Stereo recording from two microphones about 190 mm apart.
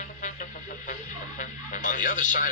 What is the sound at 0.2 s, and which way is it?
Music, 40° left (ahead or behind).